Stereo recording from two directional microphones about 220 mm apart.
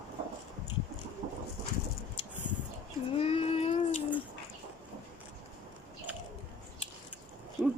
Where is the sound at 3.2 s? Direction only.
25° left (ahead or behind).